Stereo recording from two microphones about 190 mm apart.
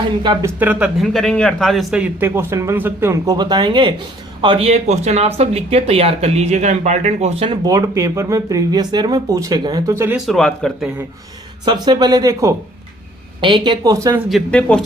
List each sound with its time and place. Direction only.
0.2 s speech: 25° right (ahead or behind)
0.6 s a man's voice: 5° right (ahead or behind)
10.2 s speech: centre (ahead or behind)
11.6 s speech: 20° right (ahead or behind)
14.3 s speech: 5° left (ahead or behind)